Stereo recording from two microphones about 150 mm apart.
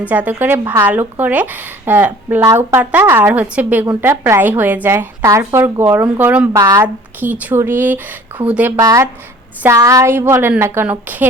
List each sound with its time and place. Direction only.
0.1 s a woman's voice: 10° right (ahead or behind)
6.5 s speech: 20° right (ahead or behind)
6.8 s a woman's voice: 10° right (ahead or behind)